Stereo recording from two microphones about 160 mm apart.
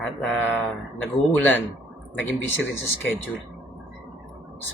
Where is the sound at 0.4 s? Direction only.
10° left (ahead or behind).